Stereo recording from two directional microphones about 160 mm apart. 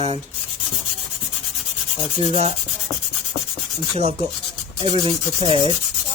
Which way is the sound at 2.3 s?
40° right (ahead or behind).